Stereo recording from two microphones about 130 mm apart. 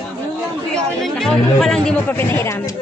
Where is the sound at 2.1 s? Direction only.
20° left (ahead or behind).